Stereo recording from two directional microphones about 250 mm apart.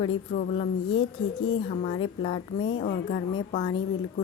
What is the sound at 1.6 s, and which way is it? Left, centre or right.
Speech, left.